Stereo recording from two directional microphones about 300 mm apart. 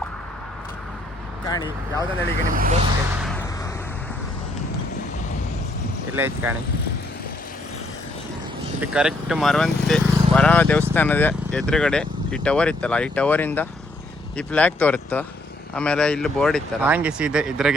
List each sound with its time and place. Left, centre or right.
1.5 s speech: centre
2.5 s speech: right
6.1 s speech: centre
8.8 s speech: centre